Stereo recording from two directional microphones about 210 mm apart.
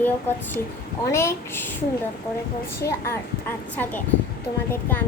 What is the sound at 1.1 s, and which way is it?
Speech, 10° left (ahead or behind).